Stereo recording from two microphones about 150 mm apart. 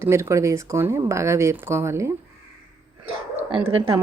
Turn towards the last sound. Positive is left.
turn(degrees=-35)  # may be behind; listen again after turning